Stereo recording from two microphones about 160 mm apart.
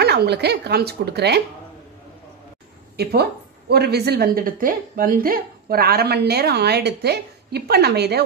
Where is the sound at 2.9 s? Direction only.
90° right.